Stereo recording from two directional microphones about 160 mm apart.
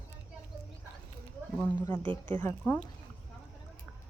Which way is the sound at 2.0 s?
30° right (ahead or behind).